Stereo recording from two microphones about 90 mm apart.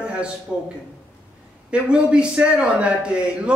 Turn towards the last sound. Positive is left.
turn(degrees=-10)  # may be behind; listen again after turning